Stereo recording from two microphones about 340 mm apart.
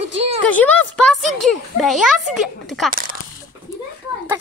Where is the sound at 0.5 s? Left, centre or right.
Centre.